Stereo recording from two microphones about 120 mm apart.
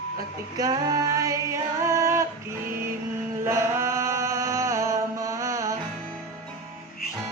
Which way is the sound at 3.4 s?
25° right (ahead or behind).